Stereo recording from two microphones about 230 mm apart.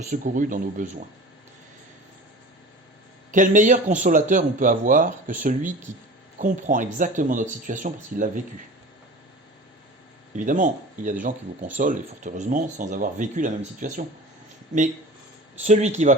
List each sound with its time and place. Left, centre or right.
0.1 s speech: right
3.3 s speech: right
10.3 s speech: right
15.6 s speech: right